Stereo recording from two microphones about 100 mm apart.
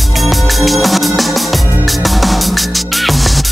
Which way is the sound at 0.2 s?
Centre (ahead or behind).